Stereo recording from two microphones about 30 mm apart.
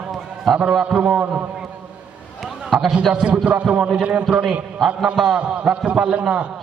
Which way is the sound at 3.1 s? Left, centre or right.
Right.